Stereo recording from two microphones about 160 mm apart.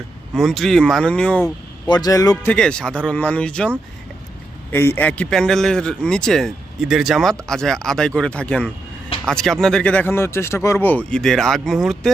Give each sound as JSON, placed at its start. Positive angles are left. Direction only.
{"t": 0.3, "sound": "a man's voice", "side_deg": 0}
{"t": 1.9, "sound": "a man's voice", "side_deg": 25}
{"t": 2.5, "sound": "speech", "side_deg": 5}
{"t": 4.7, "sound": "a man's voice", "side_deg": 15}